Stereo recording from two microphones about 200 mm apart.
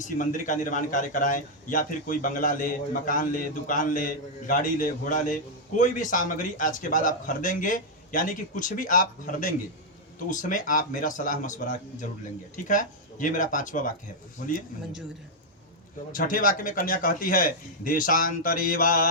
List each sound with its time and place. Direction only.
0.0 s a man's voice: 40° left (ahead or behind)
16.1 s a man's voice: 45° left (ahead or behind)